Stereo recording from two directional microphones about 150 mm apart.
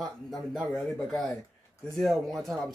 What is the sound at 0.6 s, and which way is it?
Speech, centre (ahead or behind).